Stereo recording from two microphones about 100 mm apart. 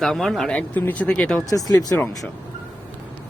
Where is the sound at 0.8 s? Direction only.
15° left (ahead or behind).